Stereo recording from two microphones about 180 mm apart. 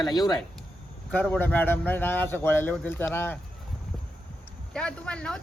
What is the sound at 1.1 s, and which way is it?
A man's voice, 10° left (ahead or behind).